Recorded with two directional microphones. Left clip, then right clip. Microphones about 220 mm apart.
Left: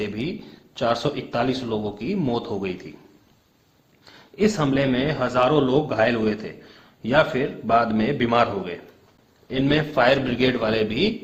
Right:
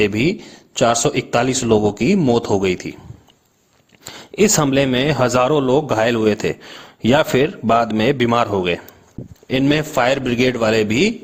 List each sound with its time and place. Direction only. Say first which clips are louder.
0.0 s speech: right 11 dB; 40° right (ahead or behind)
4.0 s speech: right 6 dB; 50° right (ahead or behind)